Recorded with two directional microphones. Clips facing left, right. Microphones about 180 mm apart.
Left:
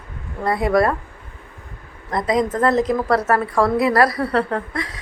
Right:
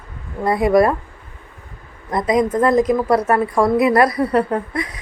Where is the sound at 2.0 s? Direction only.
20° right (ahead or behind).